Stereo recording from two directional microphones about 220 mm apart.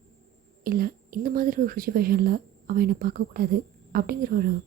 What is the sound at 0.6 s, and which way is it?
Speech, 40° right (ahead or behind).